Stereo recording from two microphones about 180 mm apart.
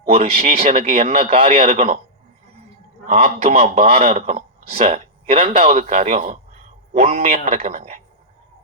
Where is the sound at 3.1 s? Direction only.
35° right (ahead or behind).